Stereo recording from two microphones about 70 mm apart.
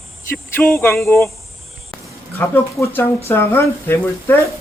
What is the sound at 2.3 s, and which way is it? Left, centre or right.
A woman's voice, left.